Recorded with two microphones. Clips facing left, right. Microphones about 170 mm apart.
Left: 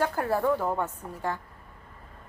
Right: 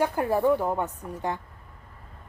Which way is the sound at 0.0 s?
15° right (ahead or behind).